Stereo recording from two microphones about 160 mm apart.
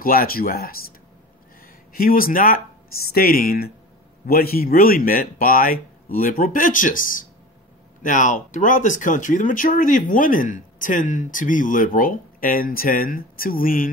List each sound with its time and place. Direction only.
0.0 s speech: 65° left (ahead or behind)
2.0 s speech: 65° left (ahead or behind)